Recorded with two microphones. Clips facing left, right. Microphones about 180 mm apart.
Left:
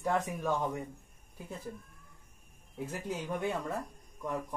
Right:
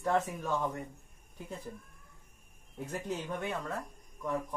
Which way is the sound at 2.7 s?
5° left (ahead or behind).